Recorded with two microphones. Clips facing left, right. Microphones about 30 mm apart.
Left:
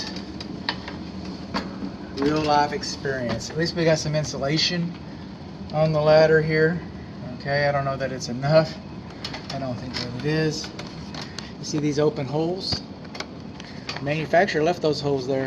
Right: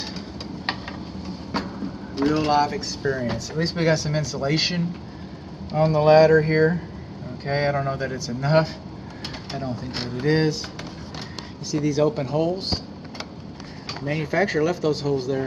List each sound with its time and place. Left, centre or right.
2.1 s speech: centre
10.2 s speech: centre
11.7 s speech: centre
14.3 s speech: centre